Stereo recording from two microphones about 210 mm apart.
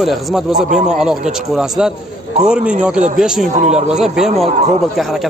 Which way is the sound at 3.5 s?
30° right (ahead or behind).